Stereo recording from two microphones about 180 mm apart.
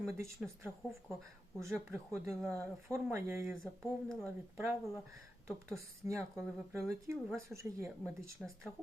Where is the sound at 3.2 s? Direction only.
15° right (ahead or behind).